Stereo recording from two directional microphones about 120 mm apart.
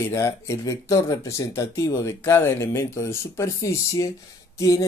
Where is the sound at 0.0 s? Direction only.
25° left (ahead or behind).